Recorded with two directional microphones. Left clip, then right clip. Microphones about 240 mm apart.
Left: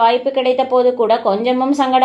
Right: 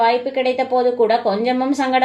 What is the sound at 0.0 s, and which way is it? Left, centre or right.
A woman's voice, left.